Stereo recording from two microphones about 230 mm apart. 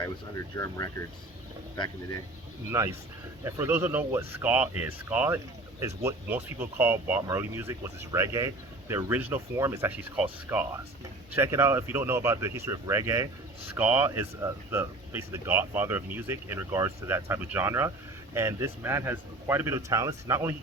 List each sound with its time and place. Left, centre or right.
0.5 s speech: centre
2.6 s speech: centre